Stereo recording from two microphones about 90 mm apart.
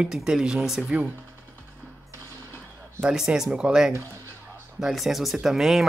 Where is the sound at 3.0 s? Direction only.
5° right (ahead or behind).